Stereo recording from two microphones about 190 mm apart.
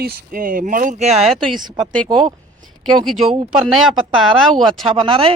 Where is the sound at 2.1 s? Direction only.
25° right (ahead or behind).